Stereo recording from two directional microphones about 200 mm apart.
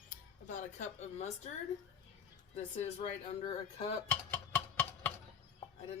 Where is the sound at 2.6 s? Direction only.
30° left (ahead or behind).